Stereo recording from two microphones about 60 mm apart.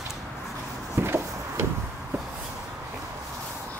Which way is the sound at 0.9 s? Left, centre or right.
Right.